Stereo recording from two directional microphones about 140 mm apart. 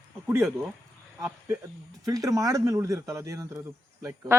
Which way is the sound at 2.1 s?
25° right (ahead or behind).